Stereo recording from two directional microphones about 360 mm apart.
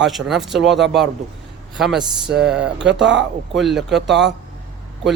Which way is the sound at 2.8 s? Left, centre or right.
Right.